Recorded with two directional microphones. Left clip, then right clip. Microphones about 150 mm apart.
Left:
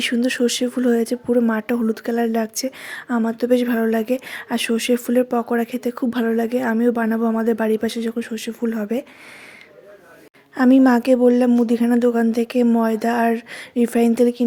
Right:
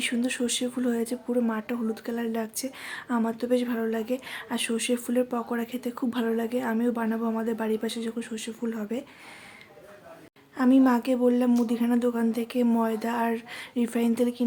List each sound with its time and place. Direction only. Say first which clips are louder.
0.0 s speech: left 9 dB; 40° left (ahead or behind)
10.5 s a woman's voice: left 7 dB; 50° left (ahead or behind)